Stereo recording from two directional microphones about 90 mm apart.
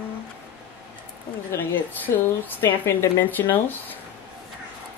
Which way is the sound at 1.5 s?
25° left (ahead or behind).